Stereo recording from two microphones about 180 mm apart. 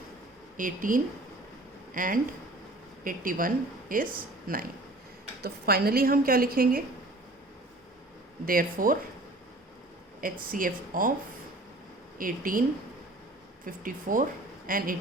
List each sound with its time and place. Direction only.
0.5 s a woman's voice: 50° right (ahead or behind)
8.4 s speech: 50° right (ahead or behind)
10.5 s speech: 50° right (ahead or behind)
12.1 s speech: 50° right (ahead or behind)
13.7 s speech: 50° right (ahead or behind)